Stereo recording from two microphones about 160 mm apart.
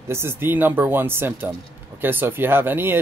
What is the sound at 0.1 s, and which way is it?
Speech, 15° right (ahead or behind).